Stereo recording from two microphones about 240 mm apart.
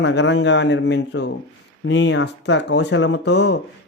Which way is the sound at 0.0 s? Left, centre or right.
Left.